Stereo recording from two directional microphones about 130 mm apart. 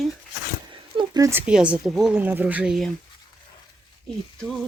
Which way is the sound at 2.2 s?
10° right (ahead or behind).